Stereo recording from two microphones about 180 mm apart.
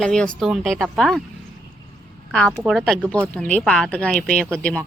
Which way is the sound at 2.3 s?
5° left (ahead or behind).